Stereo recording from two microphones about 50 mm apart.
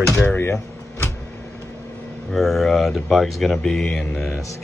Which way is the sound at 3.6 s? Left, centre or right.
Centre.